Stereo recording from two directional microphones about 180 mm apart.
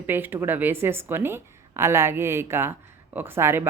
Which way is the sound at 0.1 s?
10° right (ahead or behind).